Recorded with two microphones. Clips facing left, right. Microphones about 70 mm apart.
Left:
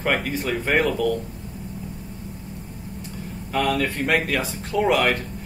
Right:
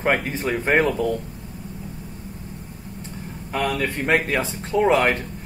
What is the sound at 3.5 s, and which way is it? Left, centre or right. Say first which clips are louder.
Speech: left 1 dB; centre.